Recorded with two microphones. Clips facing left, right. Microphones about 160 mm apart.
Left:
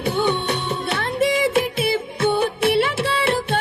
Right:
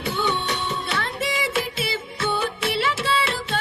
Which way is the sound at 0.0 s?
55° left (ahead or behind).